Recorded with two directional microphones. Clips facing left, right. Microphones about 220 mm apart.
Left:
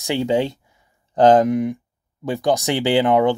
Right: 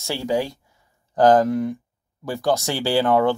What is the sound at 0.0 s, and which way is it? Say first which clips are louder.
Speech: left 4 dB; 20° left (ahead or behind).